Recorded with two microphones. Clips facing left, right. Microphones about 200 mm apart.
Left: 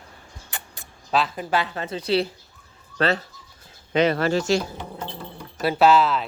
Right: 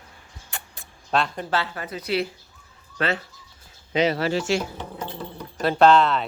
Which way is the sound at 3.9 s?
55° left (ahead or behind).